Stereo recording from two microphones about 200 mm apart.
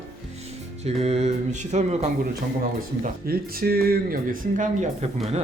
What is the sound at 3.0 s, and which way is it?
Speech, 50° right (ahead or behind).